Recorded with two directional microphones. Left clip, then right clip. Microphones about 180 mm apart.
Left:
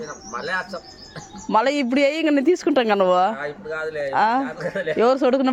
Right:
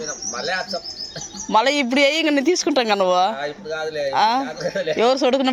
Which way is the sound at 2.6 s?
25° left (ahead or behind).